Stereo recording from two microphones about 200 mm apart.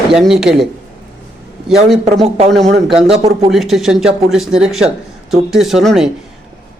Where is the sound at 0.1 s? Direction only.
Centre (ahead or behind).